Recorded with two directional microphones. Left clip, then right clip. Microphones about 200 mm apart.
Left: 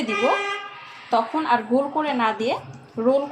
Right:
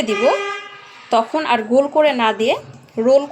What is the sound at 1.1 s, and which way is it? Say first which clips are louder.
A woman's voice: right 4 dB; 50° right (ahead or behind).